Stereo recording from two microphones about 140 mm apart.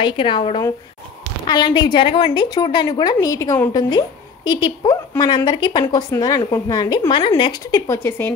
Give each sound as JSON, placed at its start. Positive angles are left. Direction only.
{"t": 0.0, "sound": "a woman's voice", "side_deg": 35}
{"t": 4.5, "sound": "a woman's voice", "side_deg": 35}
{"t": 7.6, "sound": "a woman's voice", "side_deg": 25}